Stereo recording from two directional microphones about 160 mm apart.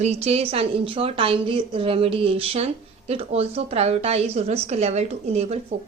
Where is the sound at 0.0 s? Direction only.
40° right (ahead or behind).